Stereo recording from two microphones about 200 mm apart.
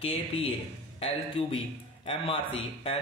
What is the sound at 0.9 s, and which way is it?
A man's voice, 30° left (ahead or behind).